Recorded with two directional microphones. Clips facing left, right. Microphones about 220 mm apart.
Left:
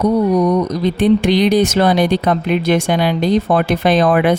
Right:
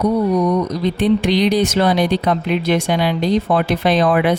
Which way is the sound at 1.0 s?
50° left (ahead or behind).